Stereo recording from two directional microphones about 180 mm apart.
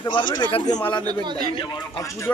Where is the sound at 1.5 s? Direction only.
25° left (ahead or behind).